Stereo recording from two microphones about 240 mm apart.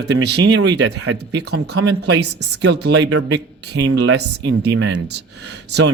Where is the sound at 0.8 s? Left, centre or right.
Right.